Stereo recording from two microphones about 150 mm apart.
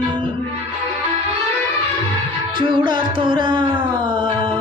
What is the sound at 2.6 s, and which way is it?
Music, 30° right (ahead or behind).